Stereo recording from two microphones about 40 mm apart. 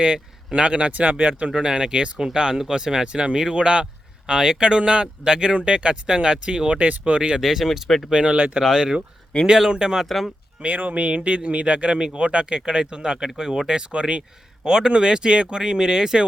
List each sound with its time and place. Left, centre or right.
0.0 s speech: right
1.5 s speech: right
3.1 s speech: right
4.3 s speech: centre; by 7.2 s right
7.2 s speech: right
7.4 s speech: centre
7.9 s speech: centre
8.1 s speech: right
10.1 s speech: centre
10.6 s speech: right
11.0 s speech: right